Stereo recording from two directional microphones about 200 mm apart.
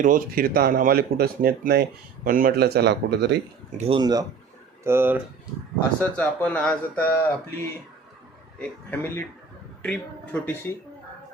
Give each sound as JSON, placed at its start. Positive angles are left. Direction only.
{"t": 0.0, "sound": "speech", "side_deg": -45}
{"t": 3.8, "sound": "speech", "side_deg": -25}
{"t": 6.0, "sound": "speech", "side_deg": 5}